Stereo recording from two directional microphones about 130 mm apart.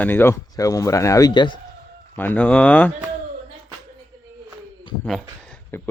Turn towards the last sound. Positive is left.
turn(degrees=15)  # may be behind; listen again after turning